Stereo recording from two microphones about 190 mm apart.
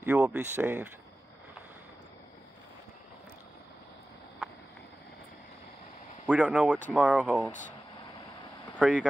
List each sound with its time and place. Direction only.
0.0 s speech: 10° right (ahead or behind)
6.2 s speech: 5° right (ahead or behind)
8.7 s speech: 5° right (ahead or behind)